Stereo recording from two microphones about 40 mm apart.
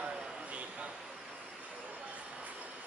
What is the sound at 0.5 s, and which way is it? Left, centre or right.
Vehicle, right.